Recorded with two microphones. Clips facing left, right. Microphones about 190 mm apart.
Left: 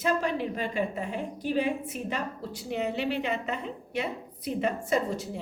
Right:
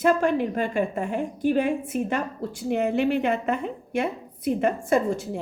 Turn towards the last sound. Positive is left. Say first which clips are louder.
# right 5 dB
turn(degrees=-50)  # may be behind; listen again after turning